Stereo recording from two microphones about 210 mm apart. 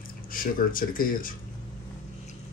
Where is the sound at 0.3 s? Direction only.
40° left (ahead or behind).